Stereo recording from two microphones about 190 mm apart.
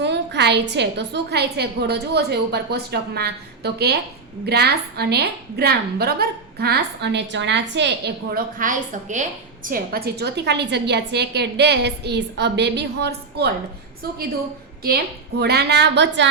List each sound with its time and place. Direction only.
0.0 s a woman's voice: 65° right (ahead or behind)
14.8 s a woman's voice: 55° right (ahead or behind)